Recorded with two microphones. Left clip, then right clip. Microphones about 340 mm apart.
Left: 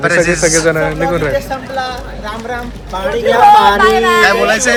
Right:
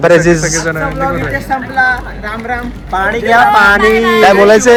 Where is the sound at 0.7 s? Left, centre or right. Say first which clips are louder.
Left 1 dB; centre.